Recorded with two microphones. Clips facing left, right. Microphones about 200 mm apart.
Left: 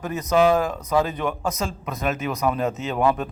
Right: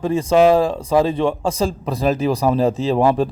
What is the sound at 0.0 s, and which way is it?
A man's voice, 30° right (ahead or behind).